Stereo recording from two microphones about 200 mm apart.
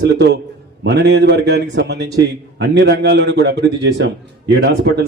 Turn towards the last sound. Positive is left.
turn(degrees=-55)  # may be behind; listen again after turning